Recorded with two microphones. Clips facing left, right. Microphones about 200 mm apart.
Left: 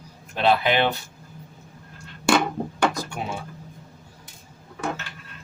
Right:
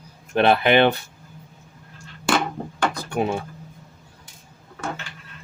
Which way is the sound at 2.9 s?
55° right (ahead or behind).